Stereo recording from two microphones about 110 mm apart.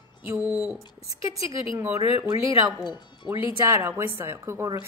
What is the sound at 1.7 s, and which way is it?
Speech, 30° right (ahead or behind).